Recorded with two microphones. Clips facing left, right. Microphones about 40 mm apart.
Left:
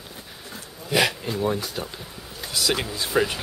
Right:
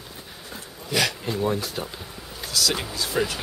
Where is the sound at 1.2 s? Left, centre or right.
Centre.